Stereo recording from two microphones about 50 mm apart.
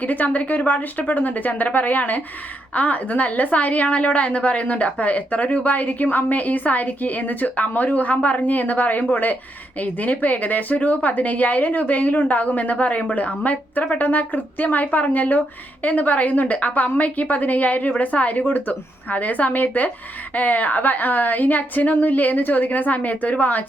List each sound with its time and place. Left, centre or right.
0.0 s a woman's voice: left